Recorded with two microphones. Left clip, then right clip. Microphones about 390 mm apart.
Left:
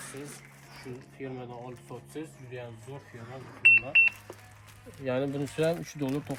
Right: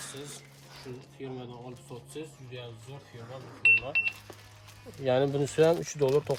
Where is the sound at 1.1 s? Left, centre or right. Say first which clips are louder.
Left 2 dB; centre.